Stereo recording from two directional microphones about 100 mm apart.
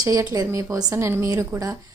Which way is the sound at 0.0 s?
35° right (ahead or behind).